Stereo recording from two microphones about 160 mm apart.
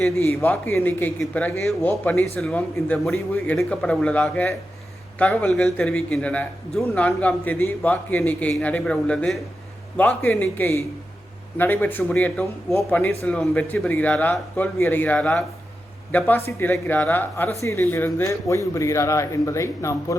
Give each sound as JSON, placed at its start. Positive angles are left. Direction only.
{"t": 0.2, "sound": "a man's voice", "side_deg": 15}